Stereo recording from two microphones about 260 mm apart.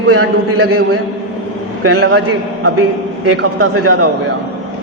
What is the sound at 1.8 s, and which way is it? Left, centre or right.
Speech, right.